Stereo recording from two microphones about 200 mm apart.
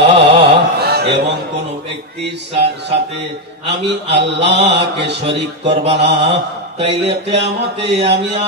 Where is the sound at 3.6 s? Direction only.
60° right (ahead or behind).